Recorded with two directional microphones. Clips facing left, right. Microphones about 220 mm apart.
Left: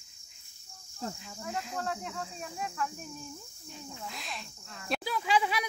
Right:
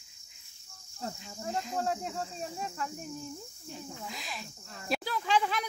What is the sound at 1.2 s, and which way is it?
Speech, 35° right (ahead or behind).